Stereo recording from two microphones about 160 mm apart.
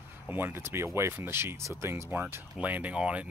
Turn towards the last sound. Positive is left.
turn(degrees=-5)  # may be behind; listen again after turning